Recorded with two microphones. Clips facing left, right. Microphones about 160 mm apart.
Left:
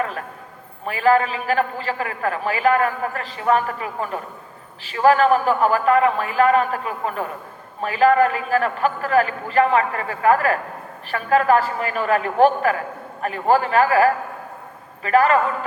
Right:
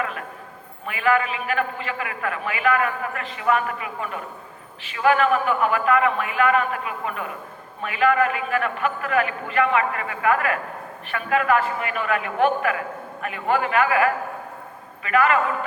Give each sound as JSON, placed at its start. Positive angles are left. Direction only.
{"t": 0.9, "sound": "a man's voice", "side_deg": 35}